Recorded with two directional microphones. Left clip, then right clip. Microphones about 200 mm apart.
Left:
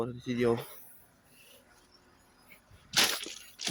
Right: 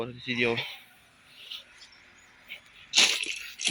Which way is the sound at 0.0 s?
30° left (ahead or behind).